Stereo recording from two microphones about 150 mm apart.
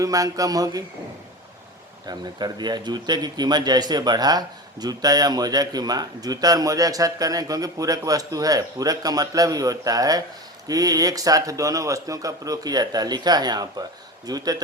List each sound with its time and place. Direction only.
0.0 s a man's voice: 25° right (ahead or behind)
2.0 s a man's voice: 30° right (ahead or behind)